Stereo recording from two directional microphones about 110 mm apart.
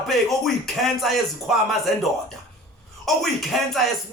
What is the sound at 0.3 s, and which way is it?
Speech, centre (ahead or behind).